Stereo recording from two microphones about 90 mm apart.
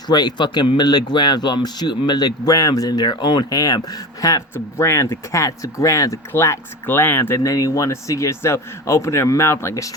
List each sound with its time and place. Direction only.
0.1 s a man's voice: 50° left (ahead or behind)
4.5 s speech: 30° left (ahead or behind)